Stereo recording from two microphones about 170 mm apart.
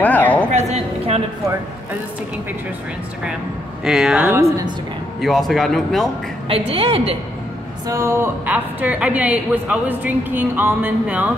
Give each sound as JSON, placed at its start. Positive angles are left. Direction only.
{"t": 0.0, "sound": "a sound", "side_deg": 10}
{"t": 0.5, "sound": "a sound", "side_deg": -40}
{"t": 3.8, "sound": "speech", "side_deg": -5}
{"t": 4.3, "sound": "a woman's voice", "side_deg": -15}
{"t": 5.2, "sound": "speech", "side_deg": 0}
{"t": 6.5, "sound": "a woman's voice", "side_deg": -35}
{"t": 7.9, "sound": "a woman's voice", "side_deg": -15}